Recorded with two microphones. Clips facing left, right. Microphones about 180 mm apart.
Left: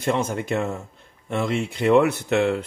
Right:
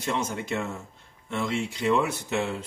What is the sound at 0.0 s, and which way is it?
A man's voice, 55° left (ahead or behind).